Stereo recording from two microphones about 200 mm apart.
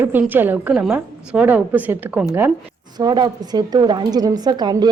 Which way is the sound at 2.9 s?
20° right (ahead or behind).